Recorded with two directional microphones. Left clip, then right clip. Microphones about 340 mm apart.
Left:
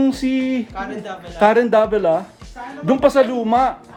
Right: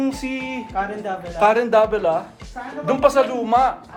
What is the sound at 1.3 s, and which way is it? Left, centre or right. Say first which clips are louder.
Speech: left 2 dB; left.